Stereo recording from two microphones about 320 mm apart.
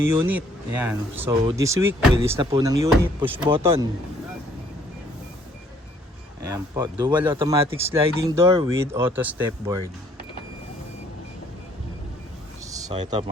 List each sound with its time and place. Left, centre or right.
0.1 s speech: centre
6.5 s speech: centre
12.7 s a sound: centre
13.0 s speech: centre